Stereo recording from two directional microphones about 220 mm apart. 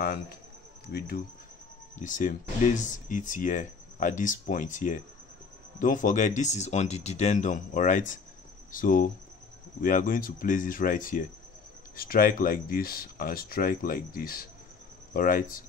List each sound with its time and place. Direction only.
0.8 s cricket: 45° left (ahead or behind)
2.0 s speech: 35° left (ahead or behind)